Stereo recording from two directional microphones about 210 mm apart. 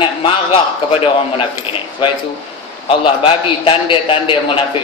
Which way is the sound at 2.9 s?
25° left (ahead or behind).